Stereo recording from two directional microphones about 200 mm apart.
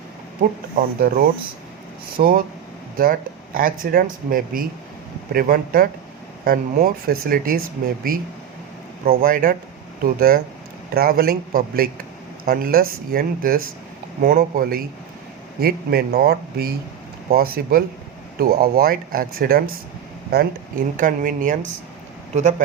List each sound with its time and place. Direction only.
0.8 s speech: 45° right (ahead or behind)
9.0 s speech: 45° right (ahead or behind)